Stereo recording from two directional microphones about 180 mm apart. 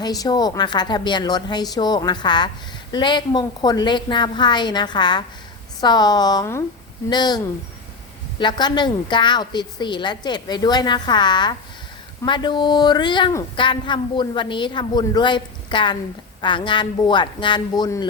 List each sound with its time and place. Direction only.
0.0 s speech: 20° left (ahead or behind)